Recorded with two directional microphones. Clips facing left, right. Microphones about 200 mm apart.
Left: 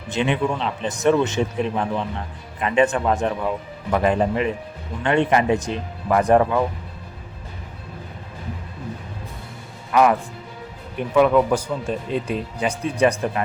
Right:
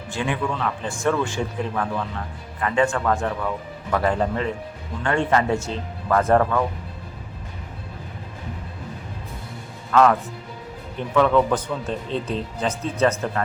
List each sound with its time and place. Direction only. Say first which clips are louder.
0.1 s speech: left 4 dB; 20° left (ahead or behind)
9.9 s speech: even; 15° left (ahead or behind)